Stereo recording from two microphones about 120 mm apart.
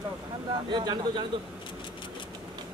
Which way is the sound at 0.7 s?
40° right (ahead or behind).